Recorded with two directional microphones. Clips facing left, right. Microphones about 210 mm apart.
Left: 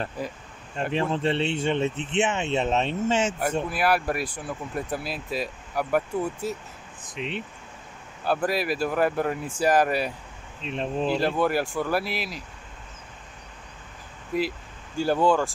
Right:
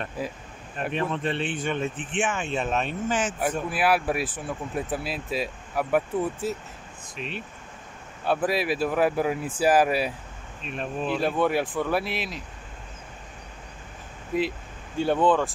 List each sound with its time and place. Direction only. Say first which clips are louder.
0.2 s speech: right 4 dB; 5° right (ahead or behind)
0.7 s speech: left 2 dB; 25° left (ahead or behind)
3.7 s speech: right 1 dB; centre (ahead or behind)
7.2 s speech: left 3 dB; 20° left (ahead or behind)
8.2 s speech: right 1 dB; centre (ahead or behind)
10.6 s speech: left 3 dB; 25° left (ahead or behind)
11.1 s speech: right 1 dB; centre (ahead or behind)
14.3 s speech: right 1 dB; centre (ahead or behind)